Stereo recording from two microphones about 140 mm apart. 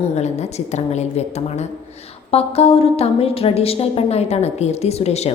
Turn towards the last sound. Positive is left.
turn(degrees=50)  # may be behind; listen again after turning